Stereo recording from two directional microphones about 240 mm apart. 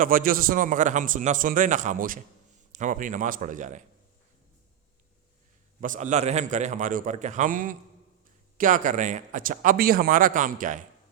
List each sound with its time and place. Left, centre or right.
0.0 s speech: right
5.8 s speech: right